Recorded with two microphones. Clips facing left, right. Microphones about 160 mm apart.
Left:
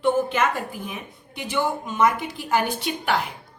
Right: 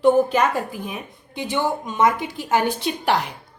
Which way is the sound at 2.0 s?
20° right (ahead or behind).